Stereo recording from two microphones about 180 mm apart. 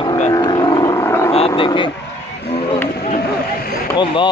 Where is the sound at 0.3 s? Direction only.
25° left (ahead or behind).